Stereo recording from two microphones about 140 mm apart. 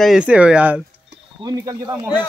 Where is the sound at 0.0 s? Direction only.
5° right (ahead or behind).